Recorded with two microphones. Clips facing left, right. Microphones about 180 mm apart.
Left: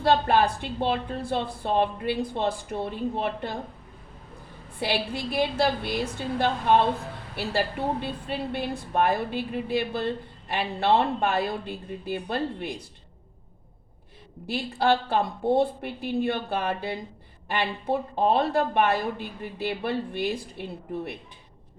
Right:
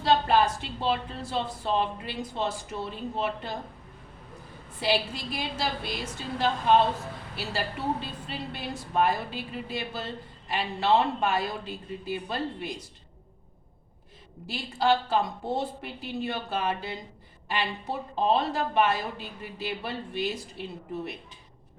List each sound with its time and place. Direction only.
0.0 s a woman's voice: 55° left (ahead or behind)
4.8 s a woman's voice: 55° left (ahead or behind)
8.5 s a woman's voice: 55° left (ahead or behind)
14.4 s a woman's voice: 60° left (ahead or behind)